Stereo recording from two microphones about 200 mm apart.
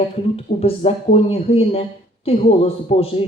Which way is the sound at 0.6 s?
30° left (ahead or behind).